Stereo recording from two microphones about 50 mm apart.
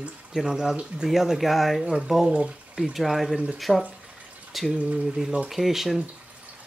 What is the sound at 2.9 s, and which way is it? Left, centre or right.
Speech, centre.